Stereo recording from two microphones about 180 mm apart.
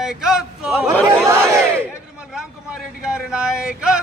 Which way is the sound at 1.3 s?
15° right (ahead or behind).